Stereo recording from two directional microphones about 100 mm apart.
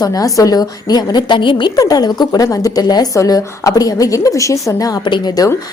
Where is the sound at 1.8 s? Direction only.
40° left (ahead or behind).